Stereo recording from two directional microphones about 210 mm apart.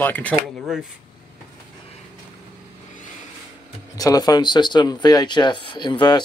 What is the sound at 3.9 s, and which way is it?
Speech, 15° left (ahead or behind).